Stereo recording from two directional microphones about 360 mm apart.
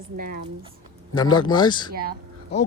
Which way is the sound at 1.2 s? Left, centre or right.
Centre.